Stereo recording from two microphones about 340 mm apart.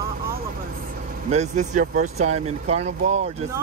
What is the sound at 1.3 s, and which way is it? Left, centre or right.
Speech, centre.